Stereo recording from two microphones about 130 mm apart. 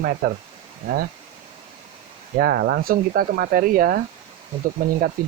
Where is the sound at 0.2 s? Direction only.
90° right.